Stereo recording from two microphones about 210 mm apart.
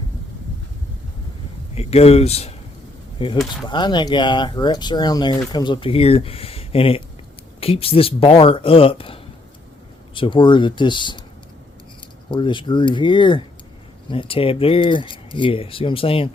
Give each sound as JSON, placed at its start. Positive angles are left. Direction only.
{"t": 1.7, "sound": "speech", "side_deg": 30}
{"t": 12.3, "sound": "speech", "side_deg": 20}